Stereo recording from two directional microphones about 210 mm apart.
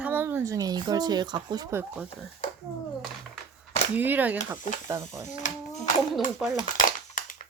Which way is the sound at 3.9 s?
10° right (ahead or behind).